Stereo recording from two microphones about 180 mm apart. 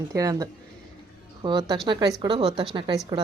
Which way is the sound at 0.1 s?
20° right (ahead or behind).